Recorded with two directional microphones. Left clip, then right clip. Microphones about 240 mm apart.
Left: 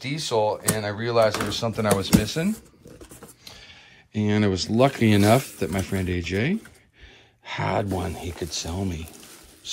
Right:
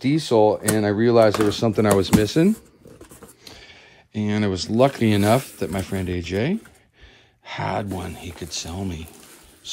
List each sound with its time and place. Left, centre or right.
0.0 s speech: right
3.4 s a sound: right
4.1 s speech: centre